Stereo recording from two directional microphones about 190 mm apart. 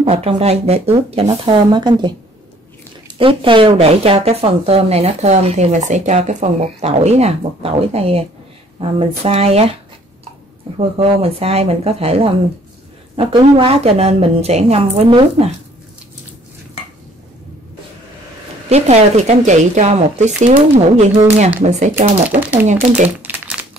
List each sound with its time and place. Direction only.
0.0 s a woman's voice: 35° right (ahead or behind)
3.2 s speech: 25° right (ahead or behind)
11.0 s speech: 30° right (ahead or behind)
18.7 s speech: 35° right (ahead or behind)
23.2 s crumpling: 5° right (ahead or behind)